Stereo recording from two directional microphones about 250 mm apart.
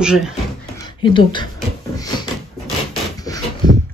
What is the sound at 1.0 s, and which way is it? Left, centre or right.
Speech, centre.